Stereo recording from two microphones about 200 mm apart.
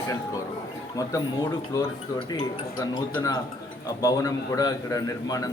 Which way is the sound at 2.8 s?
20° left (ahead or behind).